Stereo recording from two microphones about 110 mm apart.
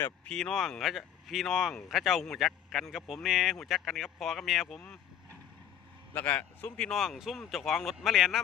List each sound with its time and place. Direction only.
0.3 s speech: 5° left (ahead or behind)